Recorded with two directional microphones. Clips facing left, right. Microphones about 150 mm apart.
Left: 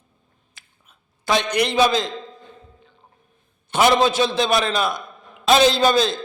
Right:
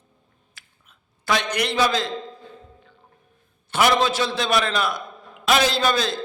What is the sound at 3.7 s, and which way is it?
A man's voice, 20° left (ahead or behind).